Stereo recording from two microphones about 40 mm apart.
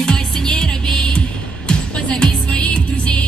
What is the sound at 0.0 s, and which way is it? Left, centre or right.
Music, centre.